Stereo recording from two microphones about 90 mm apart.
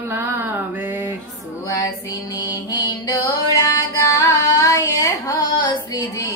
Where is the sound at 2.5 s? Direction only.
45° left (ahead or behind).